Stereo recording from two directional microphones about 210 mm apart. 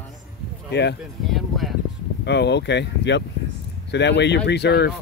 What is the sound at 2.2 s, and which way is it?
Speech, 55° left (ahead or behind).